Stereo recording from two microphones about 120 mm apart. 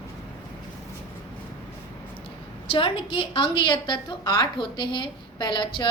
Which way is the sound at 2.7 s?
50° left (ahead or behind).